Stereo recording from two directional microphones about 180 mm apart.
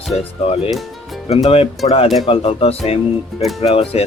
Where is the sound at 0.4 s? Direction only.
30° left (ahead or behind).